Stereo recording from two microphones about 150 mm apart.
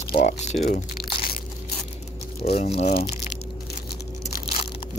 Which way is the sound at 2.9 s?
90° left.